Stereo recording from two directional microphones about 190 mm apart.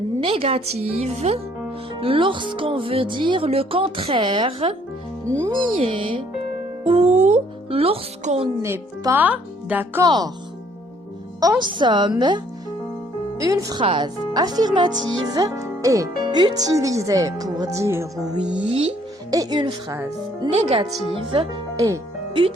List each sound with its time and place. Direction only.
0.2 s speech: 30° right (ahead or behind)
8.6 s speech: 15° right (ahead or behind)
10.1 s speech: 20° right (ahead or behind)
11.6 s speech: 25° right (ahead or behind)
13.4 s speech: 20° right (ahead or behind)
18.7 s speech: 30° right (ahead or behind)
19.3 s speech: 20° right (ahead or behind)
20.5 s speech: 35° right (ahead or behind)